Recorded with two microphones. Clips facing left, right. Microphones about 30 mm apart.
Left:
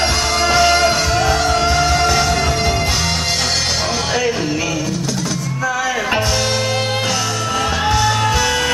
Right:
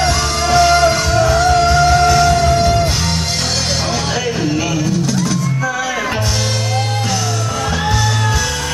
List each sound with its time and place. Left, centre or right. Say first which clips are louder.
0.0 s music: even; centre